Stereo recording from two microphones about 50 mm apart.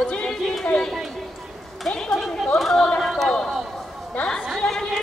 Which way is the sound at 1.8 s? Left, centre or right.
Centre.